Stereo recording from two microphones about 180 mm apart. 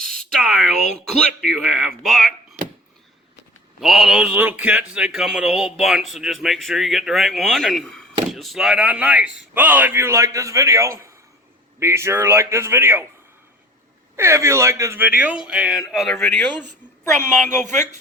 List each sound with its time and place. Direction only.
0.0 s a sound: centre (ahead or behind)
0.9 s a man's voice: centre (ahead or behind)
3.8 s a man's voice: centre (ahead or behind)
14.2 s a man's voice: 15° right (ahead or behind); by 16.4 s 5° left (ahead or behind)
17.2 s a woman's voice: 45° right (ahead or behind)